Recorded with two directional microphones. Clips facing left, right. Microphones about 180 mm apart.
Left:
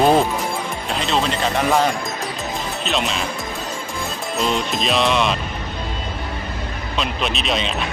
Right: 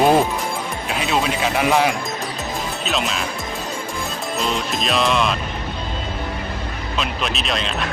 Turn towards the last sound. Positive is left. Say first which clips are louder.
# left 1 dB
turn(degrees=0)  # may be behind; listen again after turning